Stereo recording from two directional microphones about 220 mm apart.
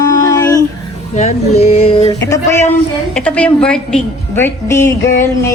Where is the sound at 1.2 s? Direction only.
30° left (ahead or behind).